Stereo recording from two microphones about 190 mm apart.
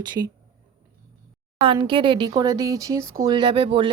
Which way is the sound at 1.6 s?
25° right (ahead or behind).